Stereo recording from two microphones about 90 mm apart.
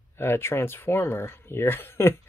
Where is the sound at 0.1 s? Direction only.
25° left (ahead or behind).